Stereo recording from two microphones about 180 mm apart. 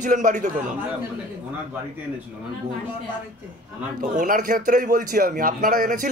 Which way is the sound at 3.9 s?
45° right (ahead or behind).